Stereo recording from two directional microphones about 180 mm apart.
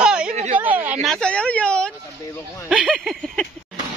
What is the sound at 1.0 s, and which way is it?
Speech, 5° left (ahead or behind).